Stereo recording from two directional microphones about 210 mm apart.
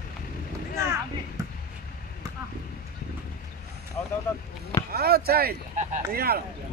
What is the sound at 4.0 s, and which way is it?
Vehicle, 10° left (ahead or behind).